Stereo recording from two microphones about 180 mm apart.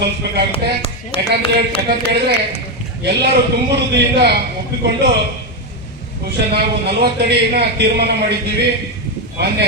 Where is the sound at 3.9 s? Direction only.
65° right (ahead or behind).